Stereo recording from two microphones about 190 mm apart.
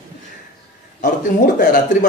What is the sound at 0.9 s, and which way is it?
A man's voice, 45° left (ahead or behind).